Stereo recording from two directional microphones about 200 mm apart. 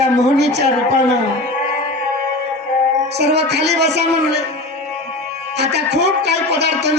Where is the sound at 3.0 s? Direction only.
55° right (ahead or behind).